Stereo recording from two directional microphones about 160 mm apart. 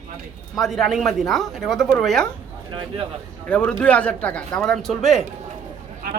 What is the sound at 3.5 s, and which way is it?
Speech, 5° left (ahead or behind).